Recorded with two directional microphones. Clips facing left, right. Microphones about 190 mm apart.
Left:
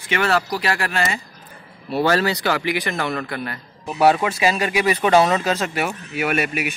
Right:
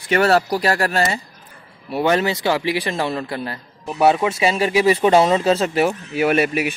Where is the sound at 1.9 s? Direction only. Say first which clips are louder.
Right 1 dB; 15° right (ahead or behind).